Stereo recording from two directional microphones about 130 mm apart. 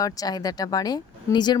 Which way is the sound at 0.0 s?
30° left (ahead or behind).